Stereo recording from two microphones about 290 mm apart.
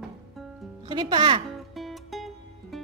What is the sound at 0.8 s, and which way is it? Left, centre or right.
Speech, centre.